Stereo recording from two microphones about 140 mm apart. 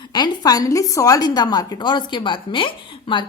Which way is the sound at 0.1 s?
30° left (ahead or behind).